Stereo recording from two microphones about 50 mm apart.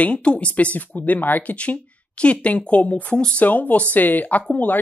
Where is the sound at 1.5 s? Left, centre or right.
Left.